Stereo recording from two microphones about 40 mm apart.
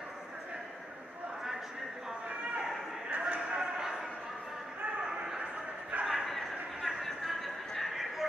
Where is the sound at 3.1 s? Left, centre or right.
Right.